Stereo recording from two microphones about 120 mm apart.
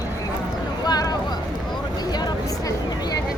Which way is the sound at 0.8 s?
35° left (ahead or behind).